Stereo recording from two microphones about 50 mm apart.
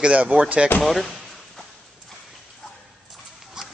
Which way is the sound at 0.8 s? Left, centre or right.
Centre.